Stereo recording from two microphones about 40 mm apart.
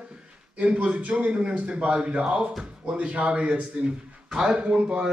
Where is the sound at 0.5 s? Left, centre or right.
Right.